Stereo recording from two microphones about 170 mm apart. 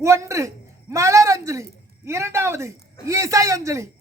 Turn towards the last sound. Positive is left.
turn(degrees=-20)  # may be behind; listen again after turning